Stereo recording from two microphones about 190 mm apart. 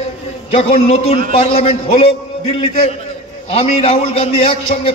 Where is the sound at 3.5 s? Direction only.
35° left (ahead or behind).